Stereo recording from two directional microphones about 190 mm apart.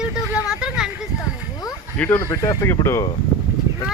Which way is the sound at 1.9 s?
10° left (ahead or behind).